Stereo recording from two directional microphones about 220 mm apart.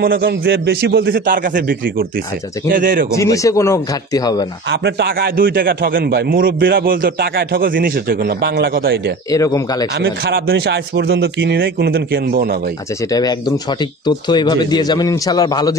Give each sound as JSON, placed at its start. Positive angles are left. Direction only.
{"t": 0.0, "sound": "a man's voice", "side_deg": -40}
{"t": 3.2, "sound": "speech", "side_deg": 15}
{"t": 4.6, "sound": "a man's voice", "side_deg": -50}
{"t": 9.3, "sound": "speech", "side_deg": 15}
{"t": 9.9, "sound": "a man's voice", "side_deg": -50}
{"t": 13.1, "sound": "speech", "side_deg": 15}